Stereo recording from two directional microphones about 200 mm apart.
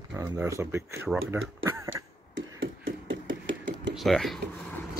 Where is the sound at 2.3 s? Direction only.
75° right (ahead or behind).